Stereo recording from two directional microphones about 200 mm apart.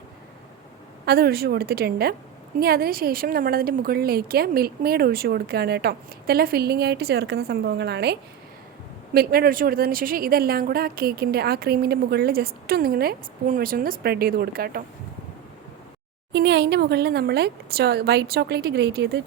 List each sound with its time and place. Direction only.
1.0 s speech: 50° right (ahead or behind)
16.3 s speech: 55° right (ahead or behind)